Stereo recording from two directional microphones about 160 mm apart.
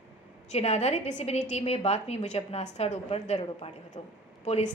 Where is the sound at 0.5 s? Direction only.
45° left (ahead or behind).